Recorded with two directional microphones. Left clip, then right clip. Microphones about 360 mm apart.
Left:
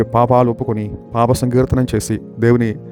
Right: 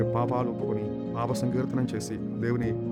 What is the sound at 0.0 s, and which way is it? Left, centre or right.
Speech, left.